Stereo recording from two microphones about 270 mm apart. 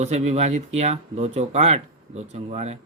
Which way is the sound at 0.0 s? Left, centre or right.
Right.